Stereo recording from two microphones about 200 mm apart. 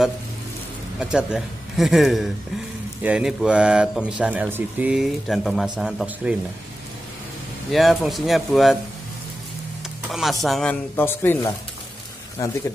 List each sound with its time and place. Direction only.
0.9 s speech: 5° right (ahead or behind)
7.7 s speech: centre (ahead or behind)
10.1 s a man's voice: centre (ahead or behind); by 12.5 s 15° left (ahead or behind)